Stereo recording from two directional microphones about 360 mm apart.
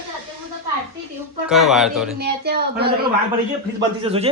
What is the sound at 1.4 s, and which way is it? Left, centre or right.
Speech, centre.